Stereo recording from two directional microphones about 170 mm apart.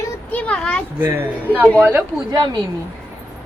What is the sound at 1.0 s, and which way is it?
Speech, 10° right (ahead or behind).